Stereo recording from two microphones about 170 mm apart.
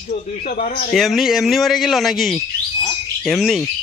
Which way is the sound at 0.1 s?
50° left (ahead or behind).